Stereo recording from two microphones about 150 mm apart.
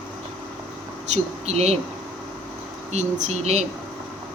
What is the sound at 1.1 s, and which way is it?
Speech, 45° right (ahead or behind).